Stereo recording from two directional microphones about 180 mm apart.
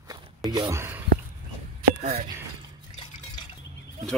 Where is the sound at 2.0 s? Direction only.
40° right (ahead or behind).